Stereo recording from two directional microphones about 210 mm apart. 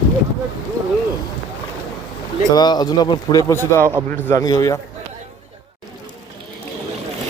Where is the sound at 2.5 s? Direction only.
20° left (ahead or behind).